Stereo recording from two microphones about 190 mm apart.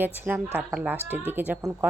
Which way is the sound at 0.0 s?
10° right (ahead or behind).